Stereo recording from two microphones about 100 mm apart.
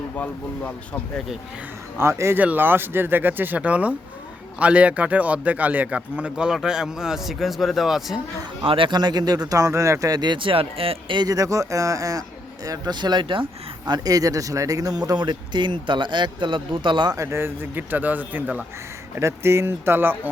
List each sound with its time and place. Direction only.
0.2 s speech: 15° left (ahead or behind)
2.0 s speech: 25° right (ahead or behind); by 8.2 s centre (ahead or behind)
8.6 s speech: 60° right (ahead or behind)
11.2 s speech: 35° right (ahead or behind); by 13.4 s 55° right (ahead or behind)
13.8 s speech: 40° right (ahead or behind)
17.2 s speech: 25° right (ahead or behind)